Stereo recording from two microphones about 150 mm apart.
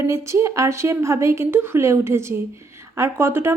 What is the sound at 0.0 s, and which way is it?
A woman's voice, 20° right (ahead or behind).